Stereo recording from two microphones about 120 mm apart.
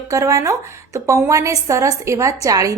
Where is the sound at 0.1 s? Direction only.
25° right (ahead or behind).